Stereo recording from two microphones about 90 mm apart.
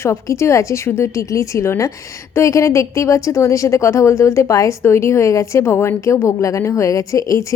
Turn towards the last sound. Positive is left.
turn(degrees=35)  # may be behind; listen again after turning